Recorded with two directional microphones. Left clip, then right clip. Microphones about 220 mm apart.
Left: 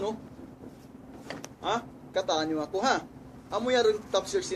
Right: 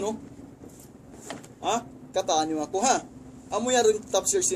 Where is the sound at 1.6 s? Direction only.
40° right (ahead or behind).